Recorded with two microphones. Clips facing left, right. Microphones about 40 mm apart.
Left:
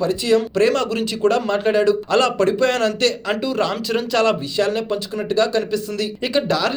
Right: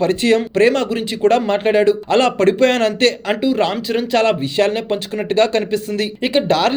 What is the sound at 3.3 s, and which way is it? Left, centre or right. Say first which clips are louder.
Speech: right 4 dB; right.